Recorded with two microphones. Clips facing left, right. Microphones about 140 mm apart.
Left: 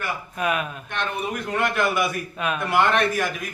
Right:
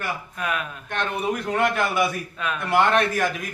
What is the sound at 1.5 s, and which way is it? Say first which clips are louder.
Speech: left 1 dB; 30° right (ahead or behind).